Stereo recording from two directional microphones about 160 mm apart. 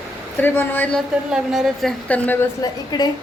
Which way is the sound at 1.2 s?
5° right (ahead or behind).